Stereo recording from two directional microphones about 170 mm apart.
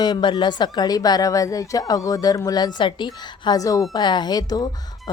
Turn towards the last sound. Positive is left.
turn(degrees=25)  # may be behind; listen again after turning